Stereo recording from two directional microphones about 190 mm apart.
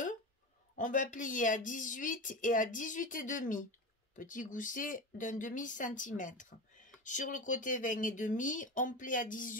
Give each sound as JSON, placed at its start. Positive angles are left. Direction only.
{"t": 0.7, "sound": "speech", "side_deg": 45}